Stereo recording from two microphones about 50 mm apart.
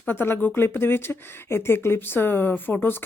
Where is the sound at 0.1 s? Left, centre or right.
Left.